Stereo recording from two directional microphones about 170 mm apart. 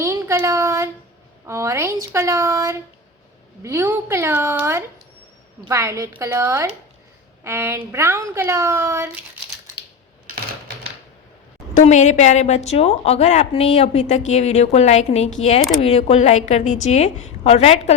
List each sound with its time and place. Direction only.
0.0 s a woman's voice: 15° right (ahead or behind)
11.7 s a woman's voice: 45° left (ahead or behind)